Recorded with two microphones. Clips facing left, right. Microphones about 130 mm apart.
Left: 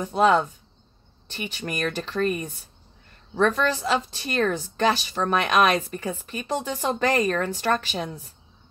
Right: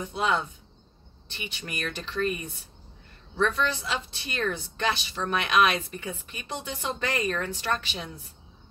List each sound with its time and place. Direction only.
0.0 s a woman's voice: 40° left (ahead or behind)